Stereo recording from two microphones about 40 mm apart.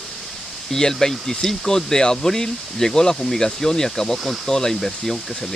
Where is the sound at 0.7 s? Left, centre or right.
Centre.